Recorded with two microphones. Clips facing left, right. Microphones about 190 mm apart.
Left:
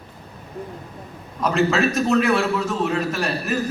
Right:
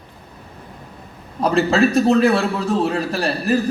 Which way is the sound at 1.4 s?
35° right (ahead or behind).